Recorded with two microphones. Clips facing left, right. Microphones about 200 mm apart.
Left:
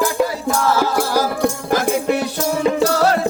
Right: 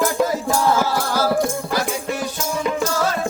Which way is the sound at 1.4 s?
50° left (ahead or behind).